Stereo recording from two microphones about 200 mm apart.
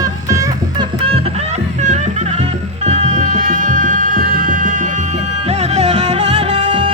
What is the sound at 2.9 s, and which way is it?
Music, 35° right (ahead or behind).